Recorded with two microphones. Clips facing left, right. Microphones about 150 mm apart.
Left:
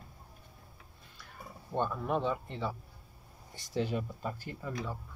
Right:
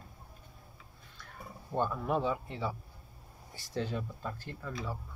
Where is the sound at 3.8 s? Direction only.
10° left (ahead or behind).